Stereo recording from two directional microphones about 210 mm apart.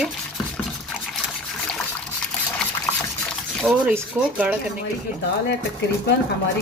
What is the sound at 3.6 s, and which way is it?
Speech, 5° right (ahead or behind).